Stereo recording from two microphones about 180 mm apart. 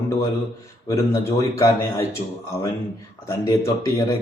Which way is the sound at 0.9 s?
15° left (ahead or behind).